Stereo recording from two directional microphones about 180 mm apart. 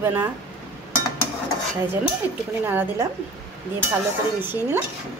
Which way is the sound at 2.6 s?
10° right (ahead or behind).